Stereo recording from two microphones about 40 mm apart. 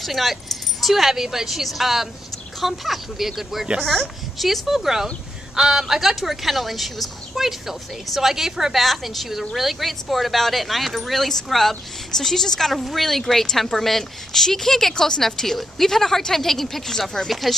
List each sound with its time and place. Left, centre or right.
0.0 s speech: centre
8.7 s speech: centre